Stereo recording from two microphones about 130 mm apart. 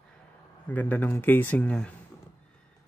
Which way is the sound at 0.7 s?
15° left (ahead or behind).